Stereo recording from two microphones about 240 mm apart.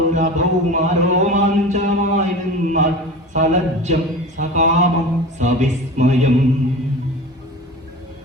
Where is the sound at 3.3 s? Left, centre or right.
Right.